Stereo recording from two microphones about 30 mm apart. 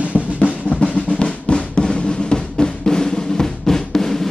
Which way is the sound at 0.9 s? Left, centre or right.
Left.